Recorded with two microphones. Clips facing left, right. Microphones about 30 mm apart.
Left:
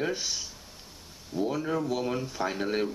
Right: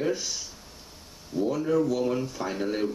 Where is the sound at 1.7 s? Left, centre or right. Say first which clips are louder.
Right 5 dB; left.